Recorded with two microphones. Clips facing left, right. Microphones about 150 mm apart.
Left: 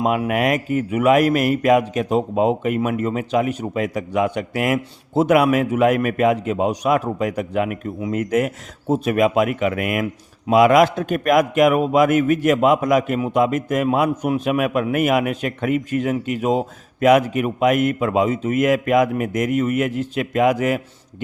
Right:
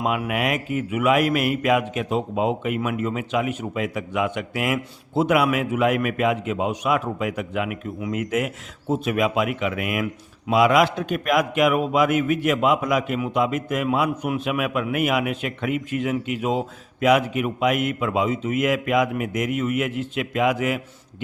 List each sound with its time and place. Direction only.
0.3 s speech: 45° left (ahead or behind)